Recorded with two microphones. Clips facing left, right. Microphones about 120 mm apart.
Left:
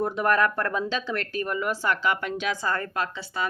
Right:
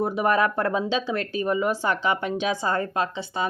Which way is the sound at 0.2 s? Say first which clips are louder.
Right 1 dB; 15° right (ahead or behind).